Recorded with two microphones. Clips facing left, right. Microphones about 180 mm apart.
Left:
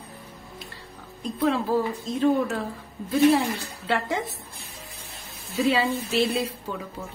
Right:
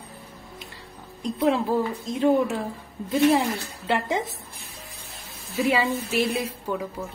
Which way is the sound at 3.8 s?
20° right (ahead or behind).